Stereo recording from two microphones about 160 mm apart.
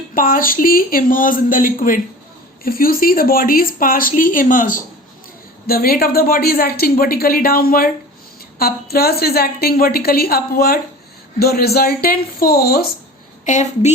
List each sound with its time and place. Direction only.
0.1 s speech: 60° left (ahead or behind)
5.6 s speech: 70° left (ahead or behind)
13.4 s a woman's voice: 50° left (ahead or behind)